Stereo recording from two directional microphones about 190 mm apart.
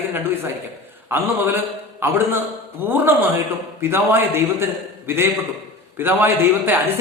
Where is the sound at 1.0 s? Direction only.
10° right (ahead or behind).